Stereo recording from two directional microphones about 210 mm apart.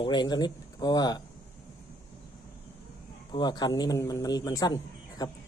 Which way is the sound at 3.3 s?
20° left (ahead or behind).